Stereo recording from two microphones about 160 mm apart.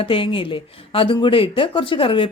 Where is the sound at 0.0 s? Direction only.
35° left (ahead or behind).